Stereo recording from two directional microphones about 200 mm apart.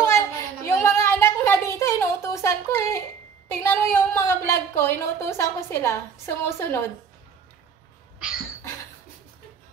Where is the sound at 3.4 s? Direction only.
15° left (ahead or behind).